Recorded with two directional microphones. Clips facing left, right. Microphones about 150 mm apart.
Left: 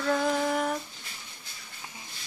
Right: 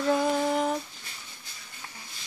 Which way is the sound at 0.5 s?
20° right (ahead or behind).